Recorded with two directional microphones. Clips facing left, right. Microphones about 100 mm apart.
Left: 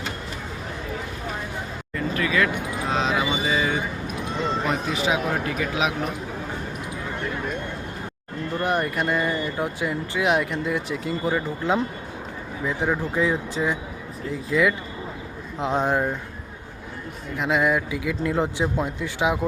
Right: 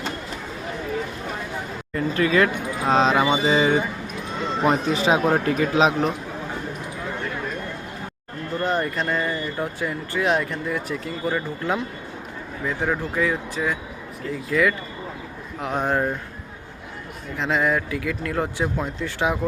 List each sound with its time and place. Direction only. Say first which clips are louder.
2.1 s speech: right 4 dB; 35° right (ahead or behind)
8.6 s speech: even; 15° left (ahead or behind)
12.6 s speech: even; 15° left (ahead or behind)
17.3 s speech: even; 10° left (ahead or behind)